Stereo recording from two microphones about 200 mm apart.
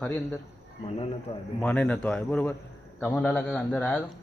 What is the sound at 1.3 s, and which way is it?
Speech, 30° left (ahead or behind).